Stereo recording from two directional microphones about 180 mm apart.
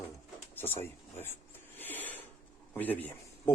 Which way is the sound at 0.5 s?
10° left (ahead or behind).